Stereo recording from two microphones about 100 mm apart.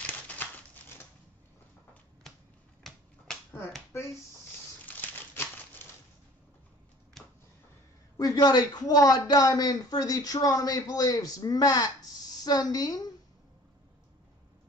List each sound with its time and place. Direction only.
0.0 s crumpling: 20° left (ahead or behind)
2.8 s finger snapping: 5° left (ahead or behind)
3.9 s speech: 25° left (ahead or behind)
4.8 s crumpling: 20° left (ahead or behind)
7.2 s a sound: centre (ahead or behind)
8.2 s a man's voice: 40° left (ahead or behind)